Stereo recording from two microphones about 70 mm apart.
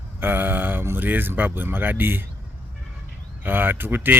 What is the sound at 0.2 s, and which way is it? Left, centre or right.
Speech, right.